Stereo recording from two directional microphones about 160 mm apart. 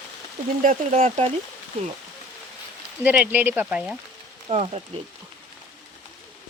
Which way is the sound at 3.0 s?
10° right (ahead or behind).